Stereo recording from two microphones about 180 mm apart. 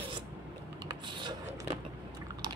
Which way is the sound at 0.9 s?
25° right (ahead or behind).